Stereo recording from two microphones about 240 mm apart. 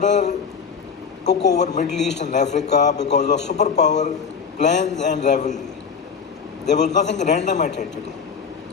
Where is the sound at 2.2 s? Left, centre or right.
Left.